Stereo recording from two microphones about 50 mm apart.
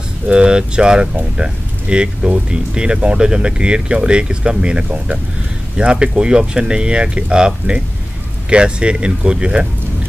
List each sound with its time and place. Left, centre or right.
0.3 s speech: centre